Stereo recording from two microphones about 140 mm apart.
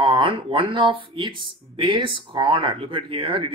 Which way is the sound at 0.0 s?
35° right (ahead or behind).